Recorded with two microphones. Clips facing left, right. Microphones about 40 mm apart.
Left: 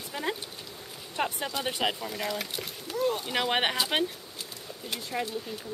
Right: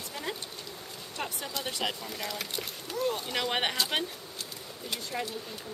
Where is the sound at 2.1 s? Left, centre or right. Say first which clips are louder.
Left 3 dB; centre.